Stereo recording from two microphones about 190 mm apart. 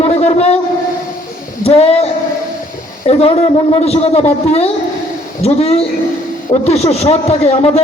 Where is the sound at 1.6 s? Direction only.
35° left (ahead or behind).